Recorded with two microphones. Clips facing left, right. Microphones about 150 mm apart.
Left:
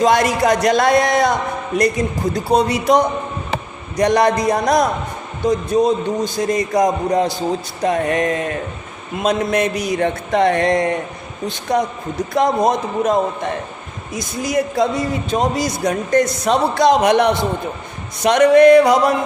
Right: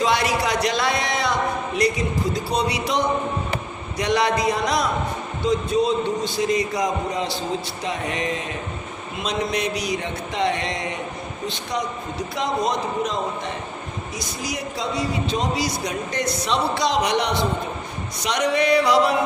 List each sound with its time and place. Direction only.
0.0 s a man's voice: 45° left (ahead or behind)